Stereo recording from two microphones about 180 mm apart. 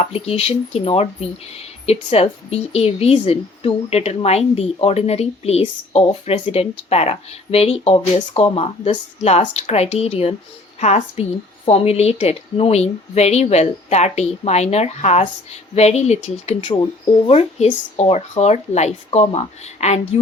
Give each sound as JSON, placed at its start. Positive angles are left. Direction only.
{"t": 0.0, "sound": "speech", "side_deg": 35}
{"t": 16.7, "sound": "speech", "side_deg": 25}
{"t": 17.9, "sound": "speech", "side_deg": 35}